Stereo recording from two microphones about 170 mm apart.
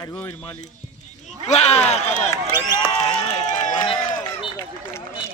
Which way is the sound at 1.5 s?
40° left (ahead or behind).